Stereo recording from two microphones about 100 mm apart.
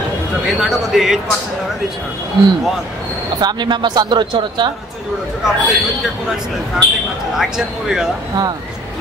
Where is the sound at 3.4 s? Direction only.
45° right (ahead or behind).